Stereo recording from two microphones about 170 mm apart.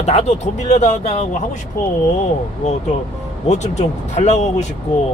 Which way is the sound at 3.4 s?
40° left (ahead or behind).